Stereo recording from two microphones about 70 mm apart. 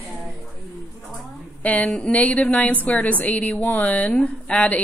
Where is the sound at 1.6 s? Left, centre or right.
Centre.